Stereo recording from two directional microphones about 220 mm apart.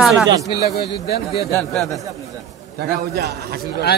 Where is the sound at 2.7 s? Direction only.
50° right (ahead or behind).